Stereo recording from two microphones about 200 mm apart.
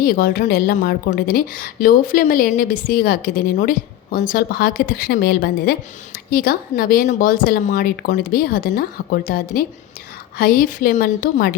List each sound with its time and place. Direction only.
0.0 s a woman's voice: 45° left (ahead or behind)